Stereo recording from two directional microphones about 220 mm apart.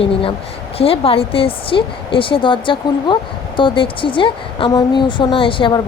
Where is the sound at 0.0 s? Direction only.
25° left (ahead or behind).